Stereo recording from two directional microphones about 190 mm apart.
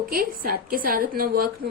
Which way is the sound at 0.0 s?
50° right (ahead or behind).